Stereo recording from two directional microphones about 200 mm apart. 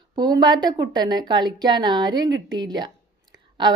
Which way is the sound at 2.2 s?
65° right (ahead or behind).